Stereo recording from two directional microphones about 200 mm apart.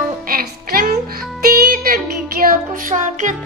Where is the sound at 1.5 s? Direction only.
45° right (ahead or behind).